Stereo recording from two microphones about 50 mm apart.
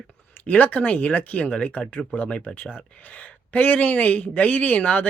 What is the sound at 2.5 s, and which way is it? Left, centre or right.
Speech, left.